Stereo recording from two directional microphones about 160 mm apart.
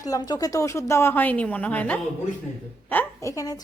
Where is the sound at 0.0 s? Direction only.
25° left (ahead or behind).